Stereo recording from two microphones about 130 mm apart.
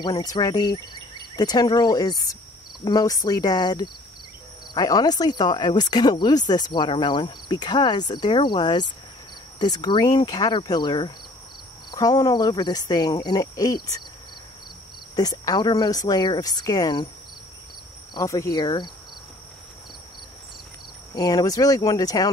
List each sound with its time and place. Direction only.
0.0 s speech: 30° left (ahead or behind)
15.1 s speech: 30° left (ahead or behind)
18.1 s speech: 25° left (ahead or behind)
21.1 s speech: 30° left (ahead or behind)